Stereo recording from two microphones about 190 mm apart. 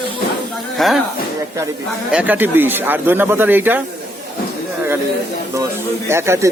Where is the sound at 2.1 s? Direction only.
10° right (ahead or behind).